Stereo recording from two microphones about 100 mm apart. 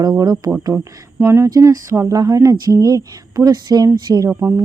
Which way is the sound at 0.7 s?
25° right (ahead or behind).